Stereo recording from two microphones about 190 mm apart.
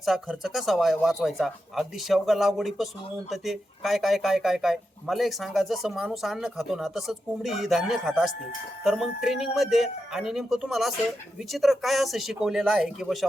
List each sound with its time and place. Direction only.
0.0 s speech: centre (ahead or behind)